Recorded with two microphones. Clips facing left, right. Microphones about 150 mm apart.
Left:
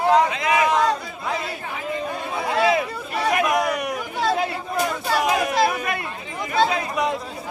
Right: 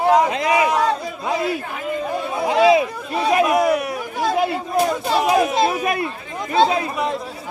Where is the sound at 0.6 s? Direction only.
10° right (ahead or behind).